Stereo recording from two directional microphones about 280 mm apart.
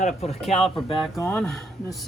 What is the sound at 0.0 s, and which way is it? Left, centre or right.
Speech, left.